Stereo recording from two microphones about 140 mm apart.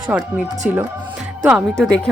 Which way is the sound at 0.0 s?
10° right (ahead or behind).